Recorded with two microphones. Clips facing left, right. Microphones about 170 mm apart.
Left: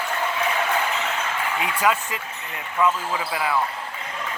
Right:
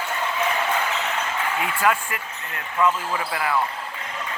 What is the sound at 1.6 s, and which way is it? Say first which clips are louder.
Speech: left 1 dB; 20° left (ahead or behind).